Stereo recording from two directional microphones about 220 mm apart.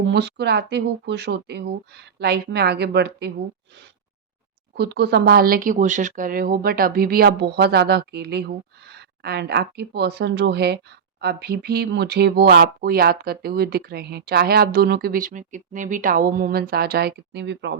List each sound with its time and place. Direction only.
0.1 s speech: 50° right (ahead or behind)
4.8 s speech: 50° right (ahead or behind)